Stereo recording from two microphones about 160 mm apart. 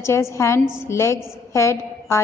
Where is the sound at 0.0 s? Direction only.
15° left (ahead or behind).